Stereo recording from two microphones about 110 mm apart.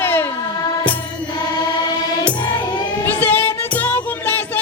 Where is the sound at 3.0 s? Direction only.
20° left (ahead or behind).